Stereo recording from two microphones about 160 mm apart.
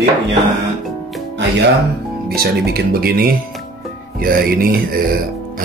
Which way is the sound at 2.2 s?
80° right.